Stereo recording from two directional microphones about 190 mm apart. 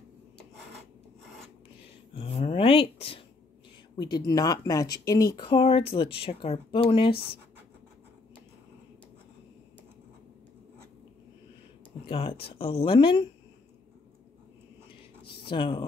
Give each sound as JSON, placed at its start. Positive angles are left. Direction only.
{"t": 2.1, "sound": "a sound", "side_deg": 30}
{"t": 4.1, "sound": "speech", "side_deg": 20}
{"t": 12.1, "sound": "speech", "side_deg": 30}
{"t": 15.4, "sound": "speech", "side_deg": 25}